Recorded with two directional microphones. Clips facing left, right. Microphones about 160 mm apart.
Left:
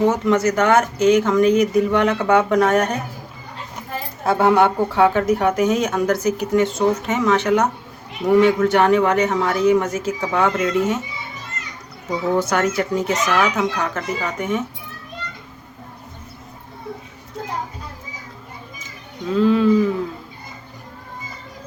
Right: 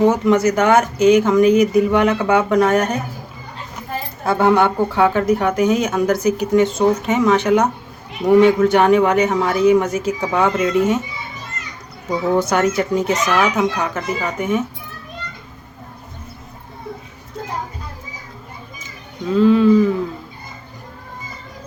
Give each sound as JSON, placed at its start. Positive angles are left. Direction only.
{"t": 0.1, "sound": "speech", "side_deg": -15}
{"t": 4.3, "sound": "speech", "side_deg": 5}
{"t": 12.4, "sound": "speech", "side_deg": -20}
{"t": 19.3, "sound": "speech", "side_deg": 0}